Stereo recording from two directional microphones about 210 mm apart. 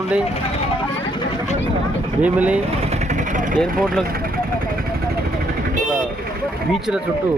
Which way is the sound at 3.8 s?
Centre (ahead or behind).